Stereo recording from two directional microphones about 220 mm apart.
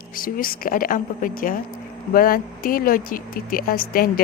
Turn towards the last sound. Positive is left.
turn(degrees=40)  # may be behind; listen again after turning